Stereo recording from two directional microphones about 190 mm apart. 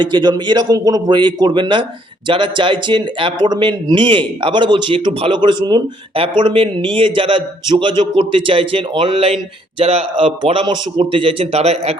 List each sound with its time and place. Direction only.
0.0 s speech: 20° right (ahead or behind)